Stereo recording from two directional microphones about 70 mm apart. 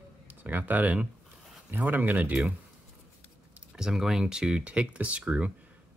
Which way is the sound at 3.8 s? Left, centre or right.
Centre.